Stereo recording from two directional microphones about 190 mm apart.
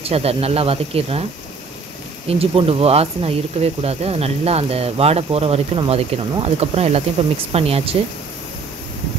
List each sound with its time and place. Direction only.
0.0 s speech: 30° right (ahead or behind)
2.2 s speech: 30° right (ahead or behind)